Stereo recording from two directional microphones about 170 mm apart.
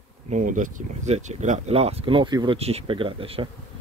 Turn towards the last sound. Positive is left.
turn(degrees=-35)  # may be behind; listen again after turning